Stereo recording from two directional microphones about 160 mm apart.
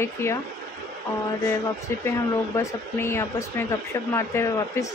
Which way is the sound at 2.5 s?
15° left (ahead or behind).